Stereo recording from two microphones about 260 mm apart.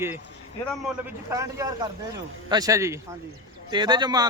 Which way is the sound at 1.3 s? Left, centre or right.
Centre.